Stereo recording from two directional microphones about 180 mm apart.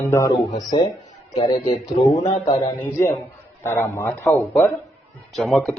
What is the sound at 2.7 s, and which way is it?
A man's voice, 10° left (ahead or behind).